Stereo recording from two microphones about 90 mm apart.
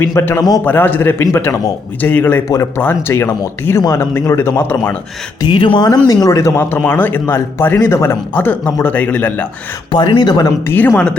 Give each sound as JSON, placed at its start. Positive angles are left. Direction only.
{"t": 0.0, "sound": "speech", "side_deg": 35}
{"t": 0.6, "sound": "speech", "side_deg": 20}
{"t": 2.0, "sound": "speech", "side_deg": 20}
{"t": 3.8, "sound": "speech", "side_deg": 40}
{"t": 4.3, "sound": "speech", "side_deg": 25}
{"t": 5.5, "sound": "speech", "side_deg": 65}
{"t": 6.1, "sound": "speech", "side_deg": 40}
{"t": 8.3, "sound": "speech", "side_deg": 20}
{"t": 9.9, "sound": "speech", "side_deg": 60}
{"t": 10.7, "sound": "speech", "side_deg": 20}